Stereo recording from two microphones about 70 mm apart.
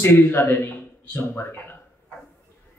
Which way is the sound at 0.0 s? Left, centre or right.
Left.